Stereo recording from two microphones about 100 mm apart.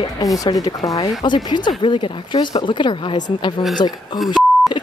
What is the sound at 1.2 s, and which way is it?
Speech, 50° left (ahead or behind).